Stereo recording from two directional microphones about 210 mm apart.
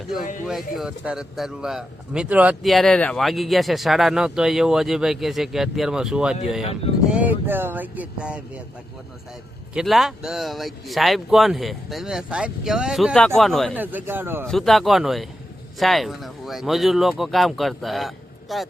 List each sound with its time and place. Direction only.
0.8 s speech: 5° right (ahead or behind)
9.7 s speech: centre (ahead or behind)
14.4 s speech: centre (ahead or behind)